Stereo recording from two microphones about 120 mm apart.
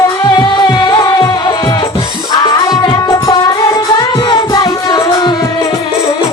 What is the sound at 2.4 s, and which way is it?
Music, 35° left (ahead or behind).